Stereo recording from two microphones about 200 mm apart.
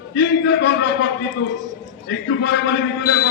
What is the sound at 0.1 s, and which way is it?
A man's voice, 60° left (ahead or behind).